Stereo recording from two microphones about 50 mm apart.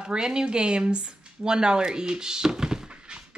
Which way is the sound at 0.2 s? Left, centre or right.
Centre.